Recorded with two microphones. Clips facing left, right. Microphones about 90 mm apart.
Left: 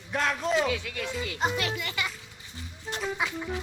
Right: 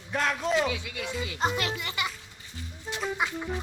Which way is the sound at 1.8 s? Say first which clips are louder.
Even; 25° right (ahead or behind).